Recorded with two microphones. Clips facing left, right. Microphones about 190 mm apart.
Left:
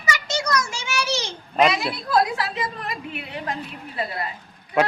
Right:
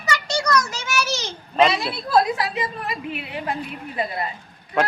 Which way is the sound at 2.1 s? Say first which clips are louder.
Right 2 dB; 15° right (ahead or behind).